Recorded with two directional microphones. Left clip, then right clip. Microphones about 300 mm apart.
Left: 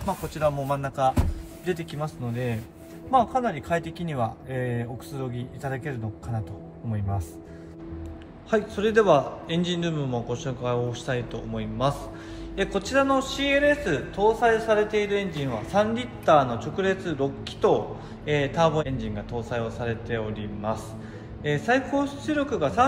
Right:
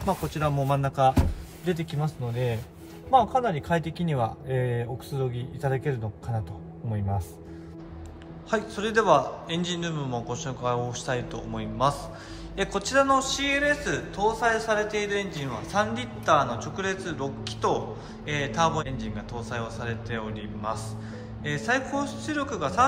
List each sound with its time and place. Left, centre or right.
0.0 s speech: centre
8.5 s a man's voice: centre